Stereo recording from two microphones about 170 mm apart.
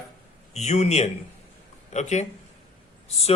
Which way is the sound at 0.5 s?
40° left (ahead or behind).